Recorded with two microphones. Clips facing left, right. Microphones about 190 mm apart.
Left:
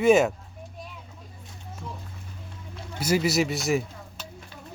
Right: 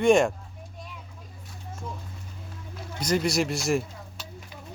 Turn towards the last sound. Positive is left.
turn(degrees=0)  # may be behind; listen again after turning